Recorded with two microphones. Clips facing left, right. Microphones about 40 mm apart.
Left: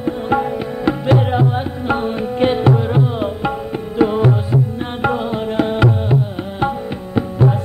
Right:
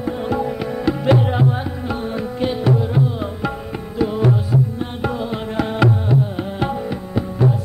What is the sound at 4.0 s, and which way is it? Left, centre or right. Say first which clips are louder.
Music: left 4 dB; left.